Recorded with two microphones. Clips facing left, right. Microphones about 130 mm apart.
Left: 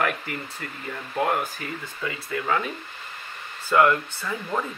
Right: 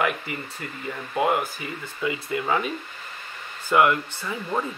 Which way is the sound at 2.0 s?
15° right (ahead or behind).